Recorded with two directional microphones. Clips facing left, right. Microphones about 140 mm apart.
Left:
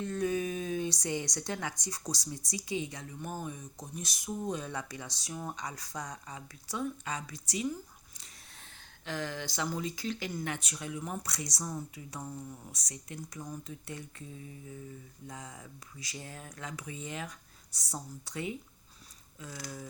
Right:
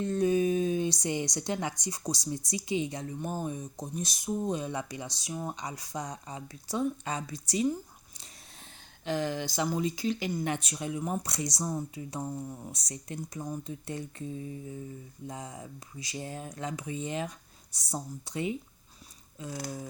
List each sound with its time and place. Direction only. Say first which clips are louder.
0.0 s speech: right 6 dB; 25° right (ahead or behind)
9.0 s speech: right 6 dB; 20° right (ahead or behind)